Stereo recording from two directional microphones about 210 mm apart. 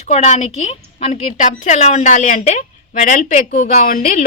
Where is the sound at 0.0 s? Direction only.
30° left (ahead or behind).